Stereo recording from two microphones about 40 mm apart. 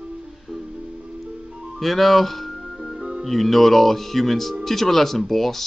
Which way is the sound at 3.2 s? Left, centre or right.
Centre.